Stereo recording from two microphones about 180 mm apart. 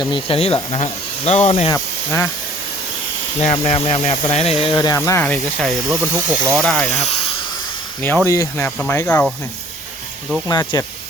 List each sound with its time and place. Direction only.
0.1 s speech: 30° left (ahead or behind)
1.7 s speech: 15° left (ahead or behind)
3.4 s speech: 35° left (ahead or behind)
4.9 s speech: 15° left (ahead or behind)
6.1 s speech: 15° right (ahead or behind)
6.6 s speech: 5° left (ahead or behind)
6.9 s snake: 35° left (ahead or behind)
8.3 s speech: 15° left (ahead or behind)
10.5 s speech: 20° left (ahead or behind)